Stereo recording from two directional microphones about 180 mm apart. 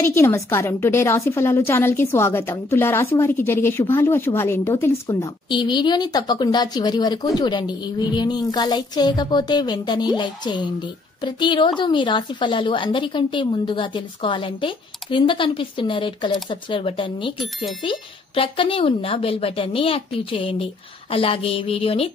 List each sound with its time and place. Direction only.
0.0 s a woman's voice: 15° left (ahead or behind); by 22.1 s 30° left (ahead or behind)